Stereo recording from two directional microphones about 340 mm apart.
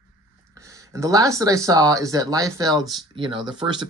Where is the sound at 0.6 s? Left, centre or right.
Centre.